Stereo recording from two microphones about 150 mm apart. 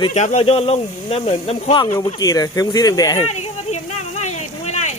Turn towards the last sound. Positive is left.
turn(degrees=50)  # may be behind; listen again after turning